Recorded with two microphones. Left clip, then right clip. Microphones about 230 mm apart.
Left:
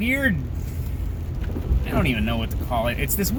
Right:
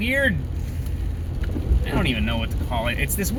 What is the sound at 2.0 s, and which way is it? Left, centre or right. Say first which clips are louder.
Speech: even; left.